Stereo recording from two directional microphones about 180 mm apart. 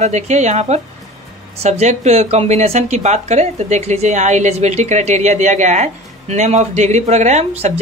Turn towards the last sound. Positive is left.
turn(degrees=-35)  # may be behind; listen again after turning